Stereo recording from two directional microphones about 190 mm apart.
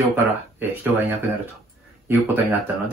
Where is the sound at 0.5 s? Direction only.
10° right (ahead or behind).